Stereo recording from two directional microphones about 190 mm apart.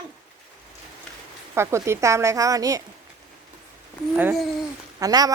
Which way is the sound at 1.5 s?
15° right (ahead or behind).